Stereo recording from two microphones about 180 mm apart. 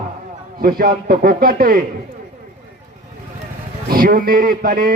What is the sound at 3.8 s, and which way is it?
Speech, 50° right (ahead or behind).